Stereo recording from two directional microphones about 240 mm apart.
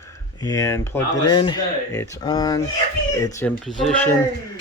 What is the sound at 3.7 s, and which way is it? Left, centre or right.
Speech, centre.